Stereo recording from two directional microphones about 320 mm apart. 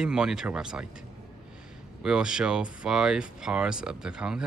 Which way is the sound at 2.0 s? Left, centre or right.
Centre.